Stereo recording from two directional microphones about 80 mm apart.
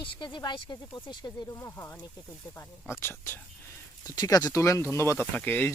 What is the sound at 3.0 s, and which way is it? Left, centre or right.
Speech, left.